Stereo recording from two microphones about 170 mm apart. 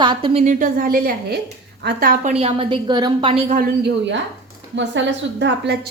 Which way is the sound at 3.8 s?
90° right.